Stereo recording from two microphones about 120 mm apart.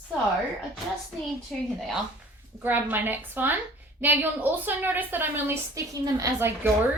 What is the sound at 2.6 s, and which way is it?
A woman's voice, 15° right (ahead or behind).